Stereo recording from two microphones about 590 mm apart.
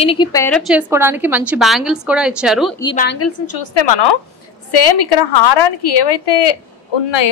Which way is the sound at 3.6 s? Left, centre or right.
Left.